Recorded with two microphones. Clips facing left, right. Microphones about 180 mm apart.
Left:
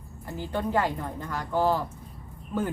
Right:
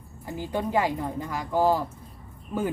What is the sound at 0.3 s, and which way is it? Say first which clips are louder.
A woman's voice: right 1 dB; 10° right (ahead or behind).